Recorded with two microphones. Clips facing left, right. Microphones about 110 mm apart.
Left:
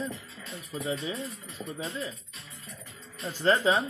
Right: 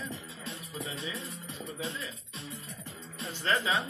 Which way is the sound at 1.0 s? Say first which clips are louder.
Left 5 dB; 30° left (ahead or behind).